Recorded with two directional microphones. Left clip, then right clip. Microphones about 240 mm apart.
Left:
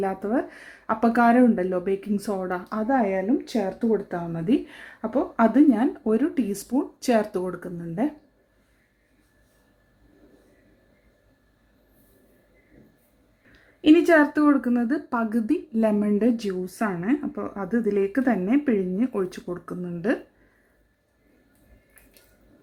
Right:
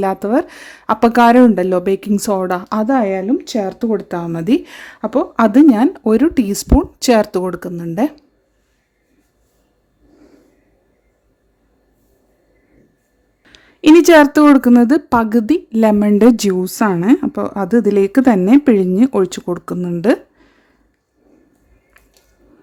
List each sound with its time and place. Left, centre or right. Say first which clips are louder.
0.0 s speech: right 10 dB; right
13.5 s speech: right 9 dB; right